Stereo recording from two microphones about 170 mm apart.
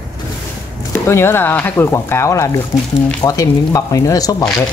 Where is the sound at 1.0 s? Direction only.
15° left (ahead or behind).